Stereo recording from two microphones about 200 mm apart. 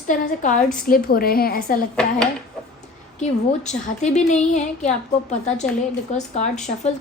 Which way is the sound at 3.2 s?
35° left (ahead or behind).